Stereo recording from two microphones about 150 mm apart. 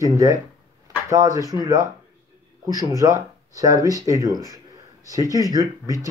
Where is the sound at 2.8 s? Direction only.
20° right (ahead or behind).